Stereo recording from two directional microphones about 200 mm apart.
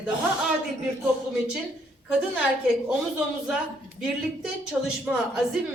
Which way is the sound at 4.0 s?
5° right (ahead or behind).